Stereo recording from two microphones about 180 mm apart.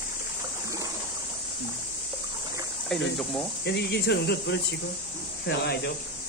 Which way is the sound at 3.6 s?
65° left (ahead or behind).